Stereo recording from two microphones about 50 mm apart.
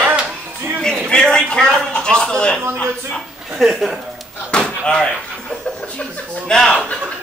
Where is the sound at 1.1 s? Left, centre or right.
Centre.